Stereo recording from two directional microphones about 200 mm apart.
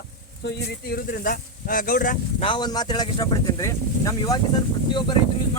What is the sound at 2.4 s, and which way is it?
Speech, 25° left (ahead or behind).